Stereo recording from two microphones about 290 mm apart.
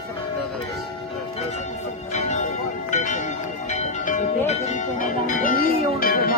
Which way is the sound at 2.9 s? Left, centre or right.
Left.